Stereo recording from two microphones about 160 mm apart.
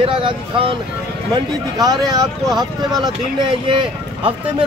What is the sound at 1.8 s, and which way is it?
Speech, 25° right (ahead or behind).